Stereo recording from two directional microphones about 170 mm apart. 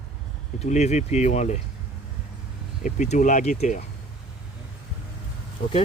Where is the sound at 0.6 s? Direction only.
40° left (ahead or behind).